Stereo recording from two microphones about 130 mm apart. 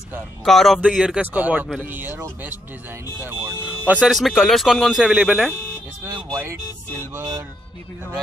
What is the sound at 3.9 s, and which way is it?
Speech, 5° right (ahead or behind).